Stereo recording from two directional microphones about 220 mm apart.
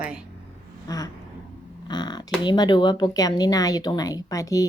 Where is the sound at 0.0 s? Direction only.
5° right (ahead or behind).